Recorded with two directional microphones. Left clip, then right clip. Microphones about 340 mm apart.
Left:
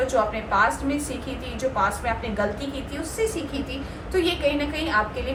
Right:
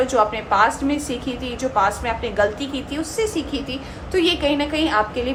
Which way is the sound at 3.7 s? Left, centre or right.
Right.